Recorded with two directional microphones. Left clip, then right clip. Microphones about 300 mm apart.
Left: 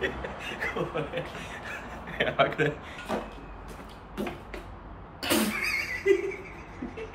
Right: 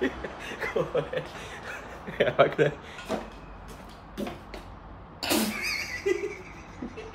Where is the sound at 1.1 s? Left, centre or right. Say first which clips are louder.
Right 1 dB; right.